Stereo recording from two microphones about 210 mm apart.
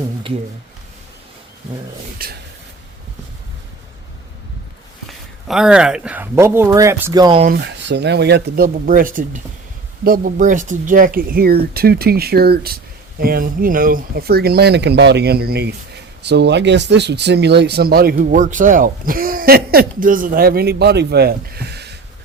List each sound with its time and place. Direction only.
2.1 s speech: 45° right (ahead or behind)
5.0 s speech: centre (ahead or behind); by 7.4 s 20° right (ahead or behind)
7.4 s speech: 50° right (ahead or behind)